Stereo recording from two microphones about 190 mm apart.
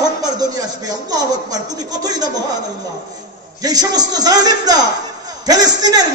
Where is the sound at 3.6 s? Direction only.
20° right (ahead or behind).